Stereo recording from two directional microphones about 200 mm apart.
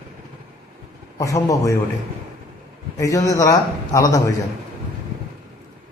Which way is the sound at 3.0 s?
15° left (ahead or behind).